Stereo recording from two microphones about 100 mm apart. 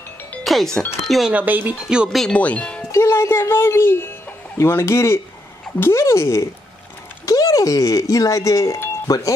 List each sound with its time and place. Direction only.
0.4 s speech: centre (ahead or behind)
1.3 s speech: 15° right (ahead or behind)
2.1 s speech: 10° left (ahead or behind)
2.9 s speech: 25° left (ahead or behind)